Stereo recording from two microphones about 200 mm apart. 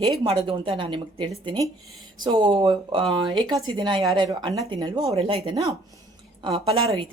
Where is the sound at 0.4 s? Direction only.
25° right (ahead or behind).